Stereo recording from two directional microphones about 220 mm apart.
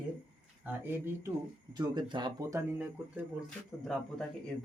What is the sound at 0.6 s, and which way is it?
Speech, 10° right (ahead or behind).